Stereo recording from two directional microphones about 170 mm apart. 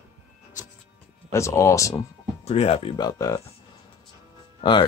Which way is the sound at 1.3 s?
15° left (ahead or behind).